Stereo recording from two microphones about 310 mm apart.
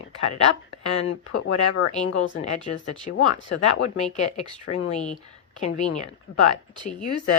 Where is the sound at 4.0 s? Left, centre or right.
Left.